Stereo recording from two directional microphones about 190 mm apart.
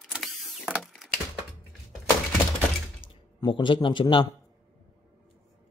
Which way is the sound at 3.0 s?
45° left (ahead or behind).